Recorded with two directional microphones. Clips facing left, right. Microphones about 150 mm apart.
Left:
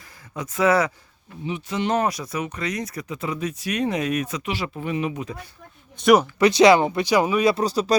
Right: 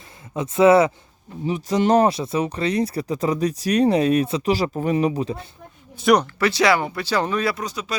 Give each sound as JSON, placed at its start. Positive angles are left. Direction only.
{"t": 0.3, "sound": "speech", "side_deg": -25}
{"t": 1.5, "sound": "speech", "side_deg": -40}
{"t": 6.0, "sound": "speech", "side_deg": 0}
{"t": 6.4, "sound": "speech", "side_deg": 20}
{"t": 7.5, "sound": "speech", "side_deg": 35}